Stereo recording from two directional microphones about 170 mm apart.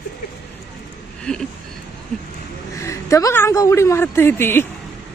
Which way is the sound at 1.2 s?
5° left (ahead or behind).